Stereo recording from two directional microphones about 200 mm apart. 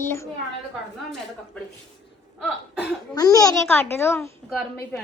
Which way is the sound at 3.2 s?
20° left (ahead or behind).